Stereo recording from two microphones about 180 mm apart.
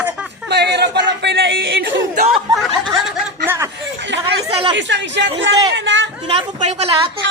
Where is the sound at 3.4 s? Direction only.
15° right (ahead or behind).